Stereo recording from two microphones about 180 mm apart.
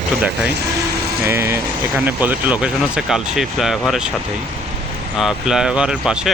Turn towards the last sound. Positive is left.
turn(degrees=-5)  # may be behind; listen again after turning